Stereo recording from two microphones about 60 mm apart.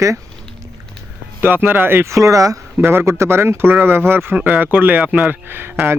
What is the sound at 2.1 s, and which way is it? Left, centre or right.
Speech, right.